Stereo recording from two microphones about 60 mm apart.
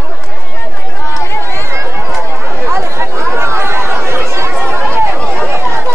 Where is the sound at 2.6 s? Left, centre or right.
Right.